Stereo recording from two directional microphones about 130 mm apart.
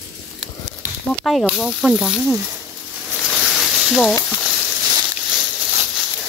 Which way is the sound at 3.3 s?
Centre (ahead or behind).